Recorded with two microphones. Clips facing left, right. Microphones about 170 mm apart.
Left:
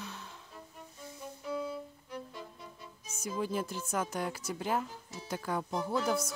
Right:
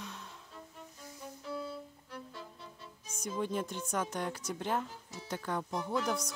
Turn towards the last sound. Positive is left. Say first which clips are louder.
# left 3 dB
turn(degrees=5)  # may be behind; listen again after turning